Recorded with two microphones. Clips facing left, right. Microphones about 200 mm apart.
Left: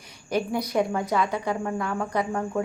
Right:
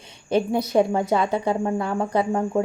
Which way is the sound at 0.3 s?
25° right (ahead or behind).